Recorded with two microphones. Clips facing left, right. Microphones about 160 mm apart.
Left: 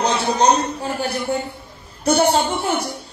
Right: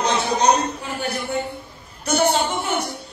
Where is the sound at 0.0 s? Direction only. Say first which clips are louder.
Left 2 dB; 35° left (ahead or behind).